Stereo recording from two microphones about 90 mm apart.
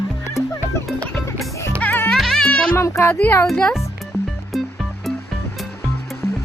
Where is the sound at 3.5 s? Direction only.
10° left (ahead or behind).